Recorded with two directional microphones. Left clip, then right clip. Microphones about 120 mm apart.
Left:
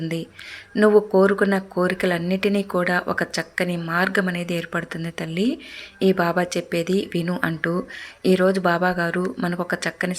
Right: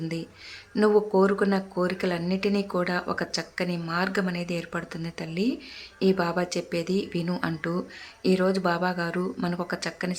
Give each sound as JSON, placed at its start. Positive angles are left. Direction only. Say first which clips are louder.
{"t": 0.8, "sound": "speech", "louder": "left 5 dB", "side_deg": 20}